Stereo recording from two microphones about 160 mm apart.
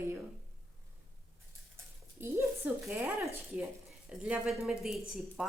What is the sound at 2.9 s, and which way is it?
Speech, 15° right (ahead or behind).